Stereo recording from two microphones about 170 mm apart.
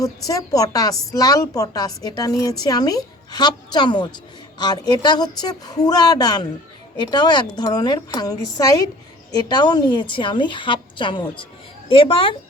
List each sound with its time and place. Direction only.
0.0 s a woman's voice: 20° left (ahead or behind)